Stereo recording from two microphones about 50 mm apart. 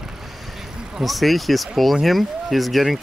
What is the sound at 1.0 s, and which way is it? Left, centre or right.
Speech, centre.